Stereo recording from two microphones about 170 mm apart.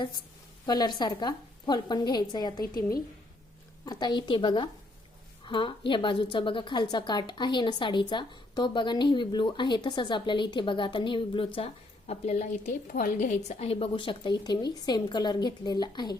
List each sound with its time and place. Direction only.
0.6 s a woman's voice: 25° left (ahead or behind)
3.8 s a woman's voice: 25° left (ahead or behind)